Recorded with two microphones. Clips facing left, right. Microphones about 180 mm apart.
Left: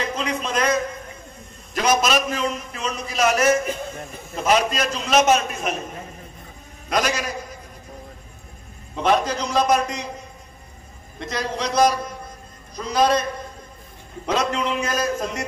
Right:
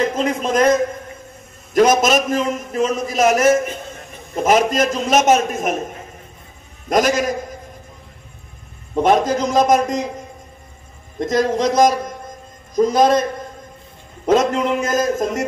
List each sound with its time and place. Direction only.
0.0 s a man's voice: 50° right (ahead or behind)
6.9 s a man's voice: 50° right (ahead or behind)
8.9 s a man's voice: 50° right (ahead or behind)
11.1 s a man's voice: 45° right (ahead or behind)